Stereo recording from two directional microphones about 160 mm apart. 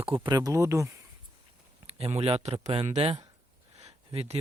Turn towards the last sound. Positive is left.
turn(degrees=-40)  # may be behind; listen again after turning